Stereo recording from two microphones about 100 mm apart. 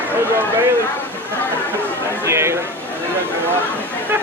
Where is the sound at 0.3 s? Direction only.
20° right (ahead or behind).